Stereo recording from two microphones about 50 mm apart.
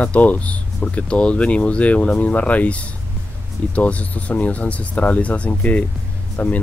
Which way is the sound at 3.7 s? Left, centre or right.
Left.